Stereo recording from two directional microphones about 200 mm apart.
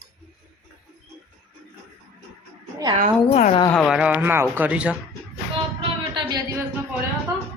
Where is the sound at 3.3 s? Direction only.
35° left (ahead or behind).